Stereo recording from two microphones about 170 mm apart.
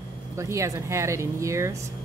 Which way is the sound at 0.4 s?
20° right (ahead or behind).